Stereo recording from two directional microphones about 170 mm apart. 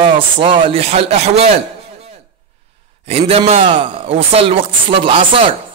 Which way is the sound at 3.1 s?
40° right (ahead or behind).